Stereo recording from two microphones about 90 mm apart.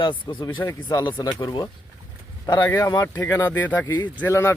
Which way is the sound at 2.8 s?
40° left (ahead or behind).